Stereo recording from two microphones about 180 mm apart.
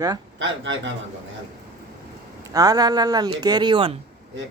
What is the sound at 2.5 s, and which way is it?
Speech, 20° right (ahead or behind).